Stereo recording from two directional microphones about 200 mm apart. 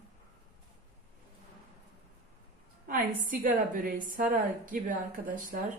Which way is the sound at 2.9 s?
45° right (ahead or behind).